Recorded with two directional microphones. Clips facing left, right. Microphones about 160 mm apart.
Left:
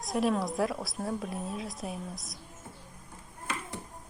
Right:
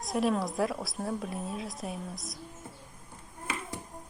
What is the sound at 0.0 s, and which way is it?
Speech, centre (ahead or behind).